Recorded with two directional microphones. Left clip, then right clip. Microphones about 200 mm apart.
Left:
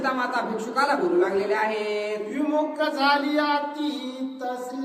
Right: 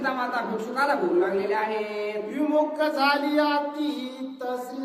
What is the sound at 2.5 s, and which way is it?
Music, 20° right (ahead or behind).